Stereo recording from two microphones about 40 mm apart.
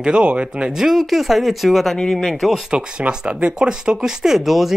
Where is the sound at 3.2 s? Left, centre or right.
Right; by 4.7 s centre.